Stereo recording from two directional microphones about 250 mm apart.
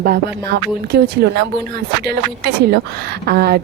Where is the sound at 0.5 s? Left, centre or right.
Right.